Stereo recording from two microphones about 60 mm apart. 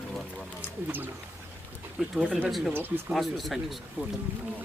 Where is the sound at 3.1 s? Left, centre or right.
Centre.